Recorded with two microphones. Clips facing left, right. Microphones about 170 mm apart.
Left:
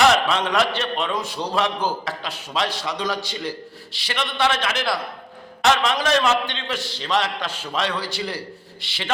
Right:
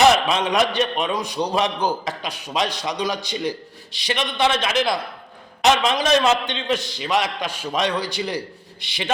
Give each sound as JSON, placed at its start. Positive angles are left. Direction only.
{"t": 0.0, "sound": "a man's voice", "side_deg": -15}